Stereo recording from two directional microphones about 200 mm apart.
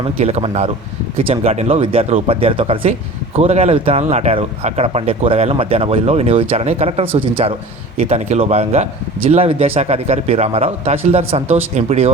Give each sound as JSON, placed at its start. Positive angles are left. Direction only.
{"t": 0.0, "sound": "speech", "side_deg": -30}